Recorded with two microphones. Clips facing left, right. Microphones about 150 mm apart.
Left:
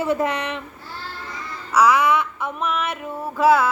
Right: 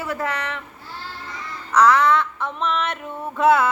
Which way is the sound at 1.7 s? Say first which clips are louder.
Right 1 dB; 10° left (ahead or behind).